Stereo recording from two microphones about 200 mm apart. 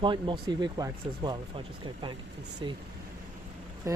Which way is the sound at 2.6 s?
25° right (ahead or behind).